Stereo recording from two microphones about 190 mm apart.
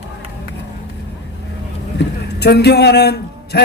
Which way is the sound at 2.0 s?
60° left (ahead or behind).